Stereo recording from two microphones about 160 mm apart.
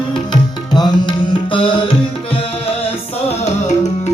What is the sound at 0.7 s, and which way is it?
Tabla, 25° left (ahead or behind).